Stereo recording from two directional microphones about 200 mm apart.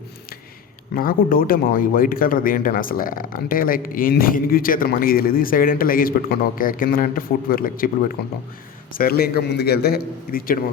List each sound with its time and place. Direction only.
0.9 s a man's voice: 45° left (ahead or behind)